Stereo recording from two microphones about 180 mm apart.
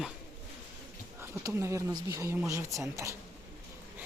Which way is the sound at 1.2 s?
15° right (ahead or behind).